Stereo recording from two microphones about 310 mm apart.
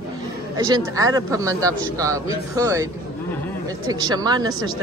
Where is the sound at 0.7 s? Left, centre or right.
Centre.